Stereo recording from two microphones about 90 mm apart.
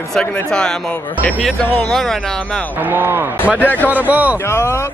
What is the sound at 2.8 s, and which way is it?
Speech, 20° right (ahead or behind).